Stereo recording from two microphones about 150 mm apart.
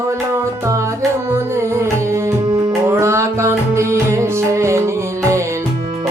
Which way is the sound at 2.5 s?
30° right (ahead or behind).